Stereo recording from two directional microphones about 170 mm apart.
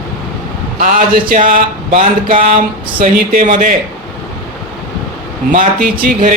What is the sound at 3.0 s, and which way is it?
Speech, 50° right (ahead or behind).